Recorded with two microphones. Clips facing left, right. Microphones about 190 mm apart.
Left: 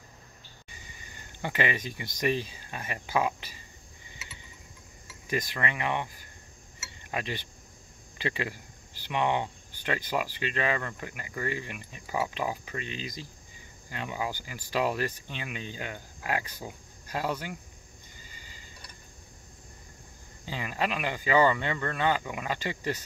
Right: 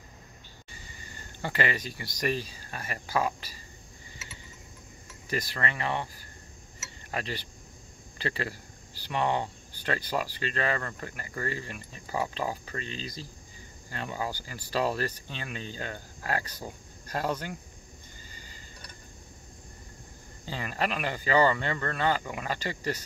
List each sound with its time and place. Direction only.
0.7 s insect: 15° left (ahead or behind)
2.1 s speech: 20° left (ahead or behind)
5.3 s speech: 15° left (ahead or behind)
7.1 s speech: 15° left (ahead or behind)
9.1 s speech: 15° left (ahead or behind)
18.3 s a sound: 45° right (ahead or behind)
20.4 s speech: 15° left (ahead or behind)